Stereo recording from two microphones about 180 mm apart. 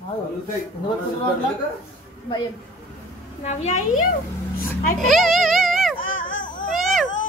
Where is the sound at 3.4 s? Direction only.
40° left (ahead or behind).